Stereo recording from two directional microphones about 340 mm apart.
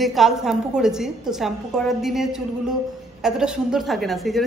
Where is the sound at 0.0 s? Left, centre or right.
Centre.